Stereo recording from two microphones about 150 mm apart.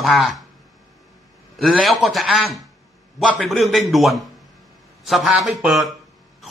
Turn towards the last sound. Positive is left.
turn(degrees=-5)  # may be behind; listen again after turning